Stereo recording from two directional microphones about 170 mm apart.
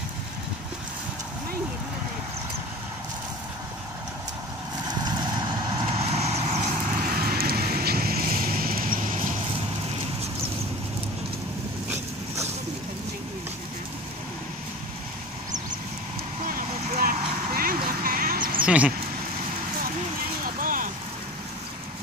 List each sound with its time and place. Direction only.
4.8 s vehicle: 25° right (ahead or behind)
5.9 s vehicle: 35° right (ahead or behind)
7.0 s vehicle: 60° right (ahead or behind)
16.4 s sheep: 55° right (ahead or behind)
18.7 s speech: 5° right (ahead or behind)
20.6 s rain on surface: 50° right (ahead or behind)